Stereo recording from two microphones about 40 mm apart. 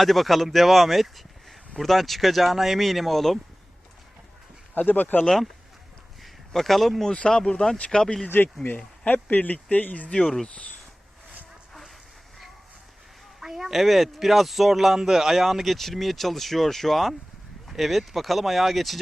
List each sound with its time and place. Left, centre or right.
0.0 s speech: centre
4.9 s speech: left
6.2 s a sound: centre
7.2 s speech: left
8.6 s speech: left
13.4 s speech: centre